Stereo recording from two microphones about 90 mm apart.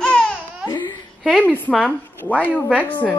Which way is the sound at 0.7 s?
55° left (ahead or behind).